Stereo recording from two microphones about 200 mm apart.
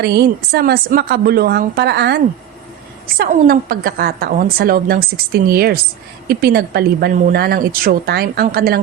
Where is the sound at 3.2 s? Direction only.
45° right (ahead or behind).